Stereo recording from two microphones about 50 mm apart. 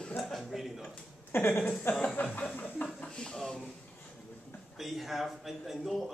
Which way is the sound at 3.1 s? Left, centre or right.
Centre.